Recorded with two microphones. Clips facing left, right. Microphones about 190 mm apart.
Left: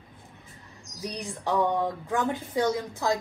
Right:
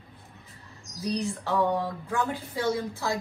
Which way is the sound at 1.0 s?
15° left (ahead or behind).